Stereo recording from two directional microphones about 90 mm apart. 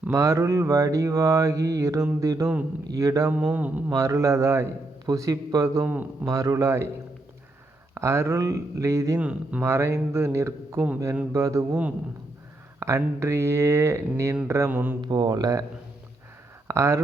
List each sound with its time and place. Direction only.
0.1 s mantra: 35° right (ahead or behind)
3.4 s speech: 15° right (ahead or behind)
3.9 s mantra: 35° right (ahead or behind)
5.8 s a man's voice: 20° right (ahead or behind)
6.2 s mantra: 40° right (ahead or behind)
7.9 s mantra: 30° right (ahead or behind)
11.7 s speech: 15° right (ahead or behind)
12.8 s mantra: 30° right (ahead or behind)
14.7 s a man's voice: 20° right (ahead or behind)
15.0 s speech: 55° right (ahead or behind)
16.6 s speech: 35° right (ahead or behind)